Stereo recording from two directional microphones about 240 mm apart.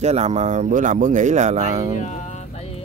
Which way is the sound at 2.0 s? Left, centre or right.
Left.